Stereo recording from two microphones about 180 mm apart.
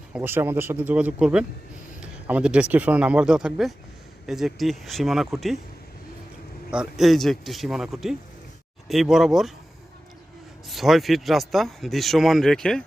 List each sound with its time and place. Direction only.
0.1 s speech: 10° right (ahead or behind)
6.7 s speech: 5° right (ahead or behind)
10.7 s speech: centre (ahead or behind)